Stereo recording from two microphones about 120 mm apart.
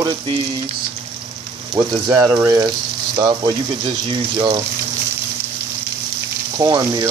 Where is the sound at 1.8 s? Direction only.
30° right (ahead or behind).